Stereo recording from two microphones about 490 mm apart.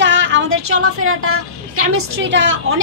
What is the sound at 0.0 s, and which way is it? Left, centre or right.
A woman's voice, right.